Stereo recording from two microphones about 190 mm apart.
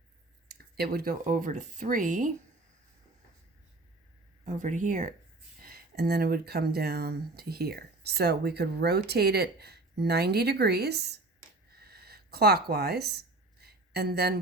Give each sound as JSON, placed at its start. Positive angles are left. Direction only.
{"t": 0.4, "sound": "speech", "side_deg": -55}
{"t": 4.4, "sound": "speech", "side_deg": -40}
{"t": 5.6, "sound": "speech", "side_deg": -55}
{"t": 11.8, "sound": "a sound", "side_deg": -55}